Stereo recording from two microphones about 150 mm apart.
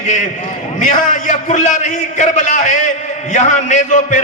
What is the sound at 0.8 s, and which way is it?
A man's voice, 60° left (ahead or behind).